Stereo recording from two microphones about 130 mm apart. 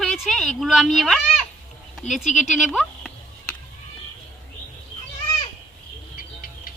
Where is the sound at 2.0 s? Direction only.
Centre (ahead or behind).